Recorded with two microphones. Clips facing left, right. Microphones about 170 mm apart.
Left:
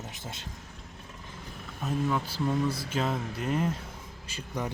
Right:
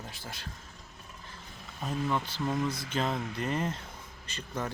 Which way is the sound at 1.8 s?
5° left (ahead or behind).